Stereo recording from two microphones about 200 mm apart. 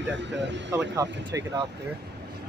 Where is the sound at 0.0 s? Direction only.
60° right (ahead or behind).